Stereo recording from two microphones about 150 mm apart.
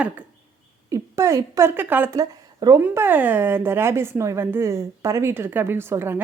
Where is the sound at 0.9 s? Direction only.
20° right (ahead or behind).